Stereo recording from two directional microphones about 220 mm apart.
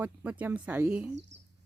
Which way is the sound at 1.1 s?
55° right (ahead or behind).